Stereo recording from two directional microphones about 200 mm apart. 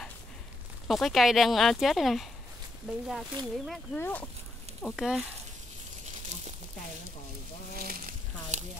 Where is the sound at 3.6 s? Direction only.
5° left (ahead or behind).